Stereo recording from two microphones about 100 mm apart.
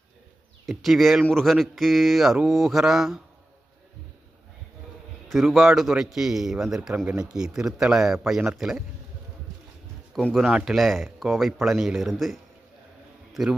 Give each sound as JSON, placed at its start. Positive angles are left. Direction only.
{"t": 0.6, "sound": "speech", "side_deg": 0}
{"t": 5.3, "sound": "speech", "side_deg": 0}
{"t": 6.9, "sound": "speech", "side_deg": -15}
{"t": 10.3, "sound": "speech", "side_deg": -5}